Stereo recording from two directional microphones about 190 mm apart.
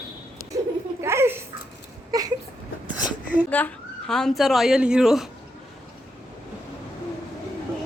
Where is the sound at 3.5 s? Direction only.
10° left (ahead or behind).